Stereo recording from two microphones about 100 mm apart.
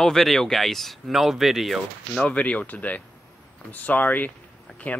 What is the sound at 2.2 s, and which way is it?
Speech, 15° left (ahead or behind).